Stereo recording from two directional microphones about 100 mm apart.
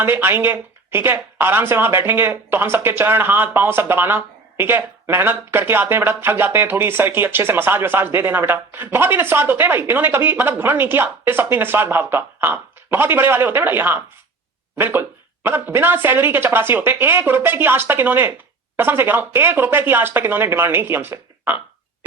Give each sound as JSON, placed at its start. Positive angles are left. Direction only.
{"t": 0.0, "sound": "speech", "side_deg": -25}